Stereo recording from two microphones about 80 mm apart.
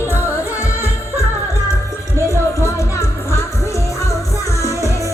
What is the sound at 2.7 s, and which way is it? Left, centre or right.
Music, left.